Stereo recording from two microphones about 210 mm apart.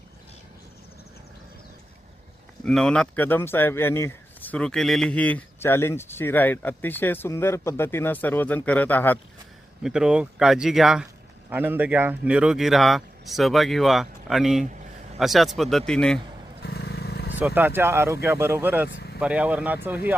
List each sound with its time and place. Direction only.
2.6 s speech: 5° left (ahead or behind)
9.8 s a man's voice: 5° right (ahead or behind)
16.6 s vehicle: 50° left (ahead or behind)
17.4 s speech: 10° right (ahead or behind)
18.9 s vehicle: 55° left (ahead or behind)
19.2 s speech: 5° right (ahead or behind)